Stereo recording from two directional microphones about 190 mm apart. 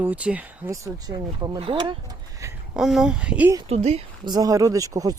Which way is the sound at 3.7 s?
35° right (ahead or behind).